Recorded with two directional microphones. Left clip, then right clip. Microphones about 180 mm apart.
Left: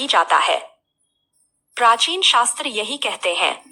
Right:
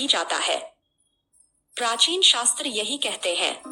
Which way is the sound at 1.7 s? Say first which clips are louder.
Left 7 dB; 5° left (ahead or behind).